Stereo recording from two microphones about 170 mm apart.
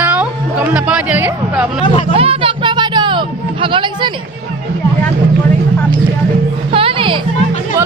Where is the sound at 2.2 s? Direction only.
35° right (ahead or behind).